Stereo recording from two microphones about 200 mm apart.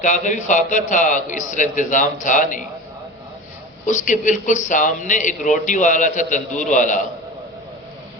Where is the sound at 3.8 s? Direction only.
40° left (ahead or behind).